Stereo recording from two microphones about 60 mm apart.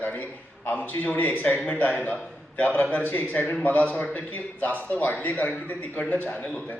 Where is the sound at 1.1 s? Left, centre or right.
Left.